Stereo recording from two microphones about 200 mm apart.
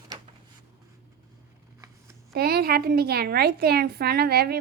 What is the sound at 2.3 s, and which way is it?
Speech, 50° right (ahead or behind).